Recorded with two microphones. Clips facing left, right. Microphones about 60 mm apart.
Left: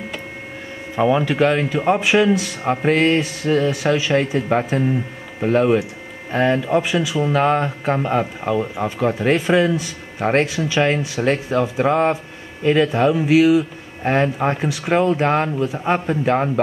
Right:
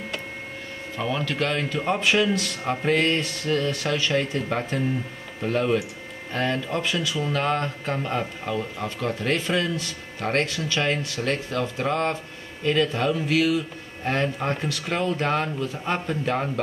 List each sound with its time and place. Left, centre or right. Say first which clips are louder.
0.9 s speech: left 10 dB; centre